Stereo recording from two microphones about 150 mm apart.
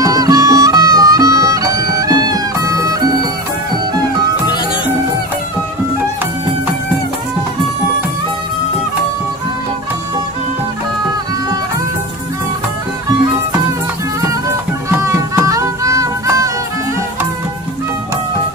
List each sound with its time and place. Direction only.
0.0 s music: 25° right (ahead or behind)
14.9 s music: 20° right (ahead or behind)